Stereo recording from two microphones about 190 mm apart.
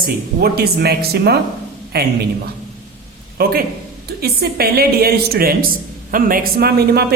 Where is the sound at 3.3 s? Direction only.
50° right (ahead or behind).